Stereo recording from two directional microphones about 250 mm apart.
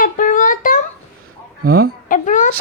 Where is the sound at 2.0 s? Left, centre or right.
Left.